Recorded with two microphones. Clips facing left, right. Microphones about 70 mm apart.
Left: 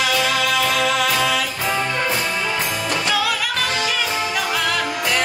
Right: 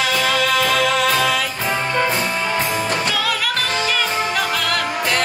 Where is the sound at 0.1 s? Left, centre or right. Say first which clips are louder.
Right 1 dB; right.